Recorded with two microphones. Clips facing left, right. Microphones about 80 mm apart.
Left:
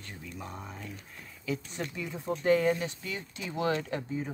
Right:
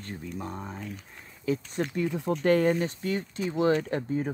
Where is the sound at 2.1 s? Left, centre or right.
Right.